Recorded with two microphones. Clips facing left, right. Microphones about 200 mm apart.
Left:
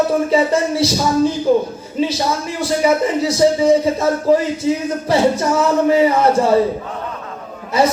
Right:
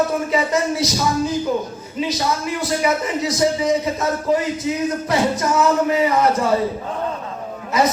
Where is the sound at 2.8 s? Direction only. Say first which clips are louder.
Left 7 dB; 30° left (ahead or behind).